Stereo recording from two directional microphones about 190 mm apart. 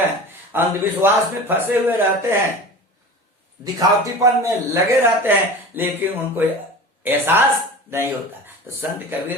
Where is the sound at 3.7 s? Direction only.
15° right (ahead or behind).